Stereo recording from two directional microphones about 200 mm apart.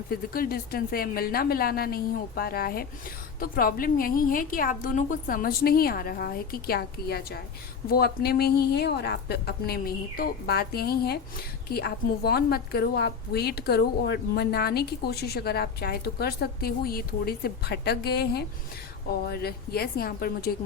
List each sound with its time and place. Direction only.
0.1 s a woman's voice: 50° left (ahead or behind)